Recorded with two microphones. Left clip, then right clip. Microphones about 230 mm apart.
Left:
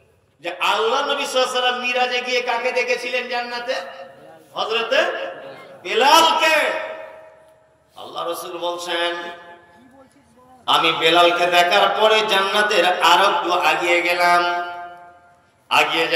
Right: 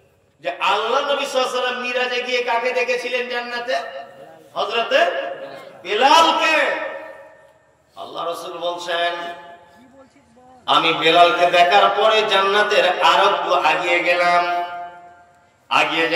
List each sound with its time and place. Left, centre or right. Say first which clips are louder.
0.4 s a man's voice: even; left
4.6 s a man's voice: right 1 dB; left
5.9 s a man's voice: even; left
8.2 s a man's voice: even; left
10.6 s a man's voice: even; left
15.7 s a man's voice: even; left